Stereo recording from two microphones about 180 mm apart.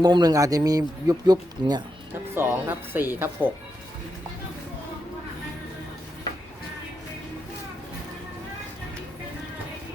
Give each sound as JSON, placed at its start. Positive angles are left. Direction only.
{"t": 0.0, "sound": "a man's voice", "side_deg": -20}
{"t": 2.3, "sound": "speech", "side_deg": -10}